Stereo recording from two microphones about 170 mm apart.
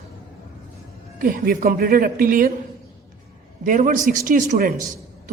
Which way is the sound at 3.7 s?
50° right (ahead or behind).